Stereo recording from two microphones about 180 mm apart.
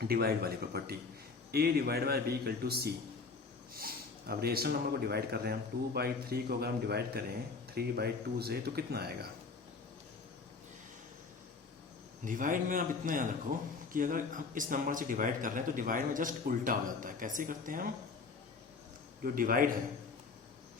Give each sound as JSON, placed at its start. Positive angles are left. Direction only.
{"t": 0.0, "sound": "speech", "side_deg": -55}
{"t": 12.2, "sound": "speech", "side_deg": -45}
{"t": 19.2, "sound": "speech", "side_deg": -50}